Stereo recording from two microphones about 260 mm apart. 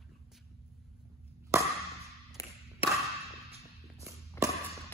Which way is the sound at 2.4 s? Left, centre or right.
Centre.